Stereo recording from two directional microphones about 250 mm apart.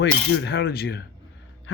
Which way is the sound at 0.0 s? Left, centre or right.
Left.